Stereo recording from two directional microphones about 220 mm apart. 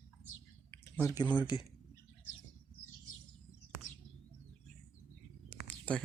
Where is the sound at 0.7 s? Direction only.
10° left (ahead or behind).